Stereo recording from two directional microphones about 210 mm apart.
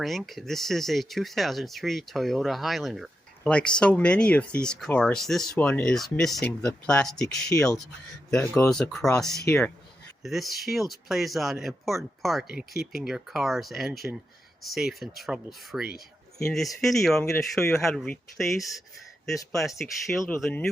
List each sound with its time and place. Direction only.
0.0 s speech: centre (ahead or behind)
10.2 s speech: centre (ahead or behind)
18.9 s a sound: centre (ahead or behind)
19.5 s speech: centre (ahead or behind)